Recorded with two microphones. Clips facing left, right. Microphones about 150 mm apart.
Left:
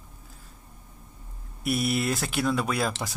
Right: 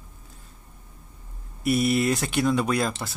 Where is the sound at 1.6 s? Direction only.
Centre (ahead or behind).